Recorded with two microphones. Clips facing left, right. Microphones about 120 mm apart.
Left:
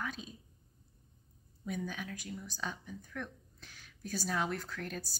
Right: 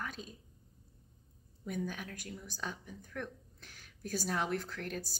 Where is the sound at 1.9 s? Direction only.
50° right (ahead or behind).